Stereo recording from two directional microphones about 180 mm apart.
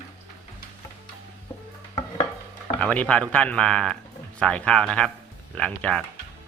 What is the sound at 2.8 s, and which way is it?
Speech, 5° left (ahead or behind).